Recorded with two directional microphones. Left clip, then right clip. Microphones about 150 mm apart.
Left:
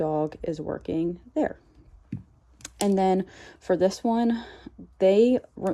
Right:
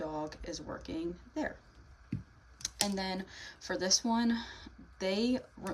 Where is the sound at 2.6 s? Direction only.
25° left (ahead or behind).